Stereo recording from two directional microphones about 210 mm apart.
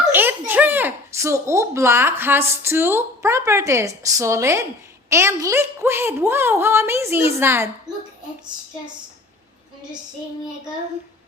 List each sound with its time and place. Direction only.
0.1 s speech: 10° right (ahead or behind)